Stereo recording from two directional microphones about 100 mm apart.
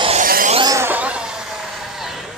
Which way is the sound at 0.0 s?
75° right (ahead or behind).